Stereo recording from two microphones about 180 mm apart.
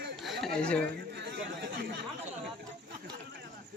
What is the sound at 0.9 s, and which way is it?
Chatter, 65° right (ahead or behind).